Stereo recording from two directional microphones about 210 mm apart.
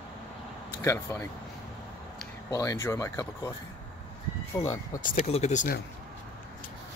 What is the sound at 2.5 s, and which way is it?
Speech, 15° left (ahead or behind).